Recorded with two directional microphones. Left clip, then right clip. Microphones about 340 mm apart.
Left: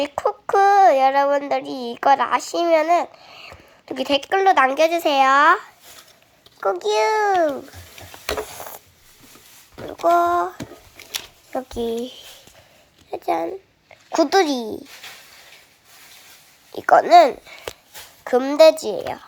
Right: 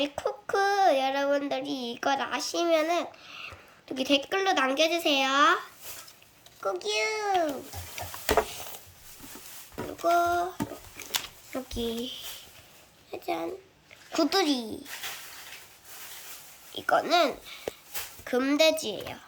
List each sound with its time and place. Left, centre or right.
0.4 s a child's voice: centre
1.6 s a woman's voice: left
2.0 s speech: centre
8.3 s stir: centre
10.0 s speech: centre
11.5 s speech: centre
14.2 s speech: centre
16.7 s speech: centre
18.3 s speech: centre